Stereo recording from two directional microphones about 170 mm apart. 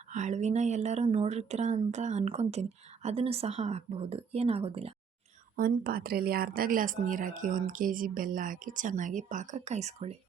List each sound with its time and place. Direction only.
0.1 s speech: 45° right (ahead or behind)
5.5 s speech: 60° right (ahead or behind); by 10.2 s 40° right (ahead or behind)